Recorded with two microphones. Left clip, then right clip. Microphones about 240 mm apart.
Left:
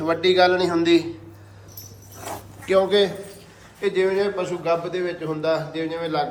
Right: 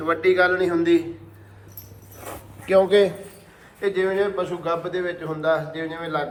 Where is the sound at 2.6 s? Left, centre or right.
Centre.